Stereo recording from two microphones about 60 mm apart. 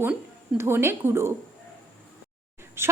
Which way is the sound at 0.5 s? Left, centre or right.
Right.